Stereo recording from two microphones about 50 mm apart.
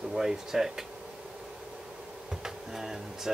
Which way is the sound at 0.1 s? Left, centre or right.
Centre.